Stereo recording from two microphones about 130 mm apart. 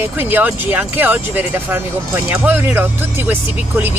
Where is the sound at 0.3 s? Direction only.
15° right (ahead or behind).